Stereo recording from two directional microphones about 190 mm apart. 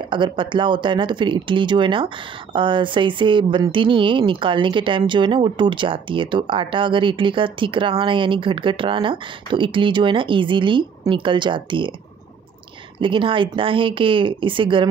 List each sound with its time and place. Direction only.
0.1 s speech: 25° right (ahead or behind)
13.0 s speech: 25° right (ahead or behind)